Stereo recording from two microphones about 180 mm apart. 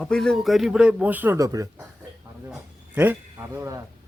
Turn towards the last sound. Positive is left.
turn(degrees=-15)  # may be behind; listen again after turning